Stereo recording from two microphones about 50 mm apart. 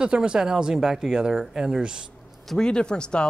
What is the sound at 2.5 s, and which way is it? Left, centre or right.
Speech, centre.